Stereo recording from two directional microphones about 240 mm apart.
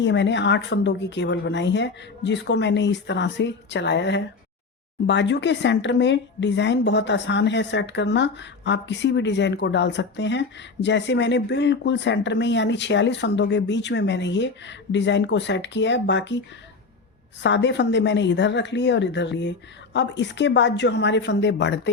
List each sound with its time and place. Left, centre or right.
0.0 s speech: left
17.4 s speech: left